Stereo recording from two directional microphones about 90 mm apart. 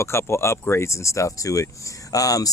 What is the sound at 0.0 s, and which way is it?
Speech, 30° left (ahead or behind).